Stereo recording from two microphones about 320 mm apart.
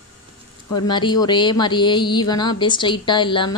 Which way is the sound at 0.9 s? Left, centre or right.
Centre.